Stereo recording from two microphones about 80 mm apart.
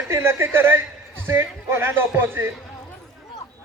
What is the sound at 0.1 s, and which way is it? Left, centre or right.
Speech, right.